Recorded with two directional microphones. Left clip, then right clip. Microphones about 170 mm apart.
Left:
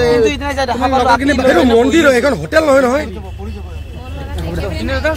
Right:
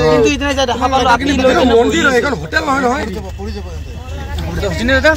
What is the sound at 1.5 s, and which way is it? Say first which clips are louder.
Speech: left 1 dB; 70° left (ahead or behind).